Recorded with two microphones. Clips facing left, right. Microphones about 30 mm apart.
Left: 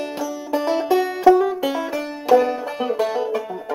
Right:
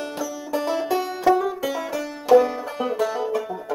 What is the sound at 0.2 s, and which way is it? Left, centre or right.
Music, left.